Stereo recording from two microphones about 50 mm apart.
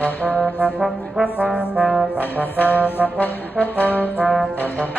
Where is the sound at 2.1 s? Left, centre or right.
Left.